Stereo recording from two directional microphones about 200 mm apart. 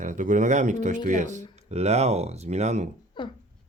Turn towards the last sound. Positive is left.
turn(degrees=25)  # may be behind; listen again after turning